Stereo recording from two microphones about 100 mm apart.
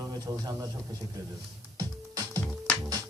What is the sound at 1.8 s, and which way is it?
Music, 40° right (ahead or behind).